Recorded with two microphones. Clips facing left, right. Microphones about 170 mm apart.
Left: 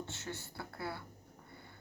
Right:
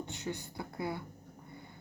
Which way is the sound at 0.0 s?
15° right (ahead or behind).